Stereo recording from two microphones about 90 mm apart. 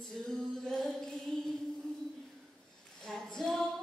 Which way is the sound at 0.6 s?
5° left (ahead or behind).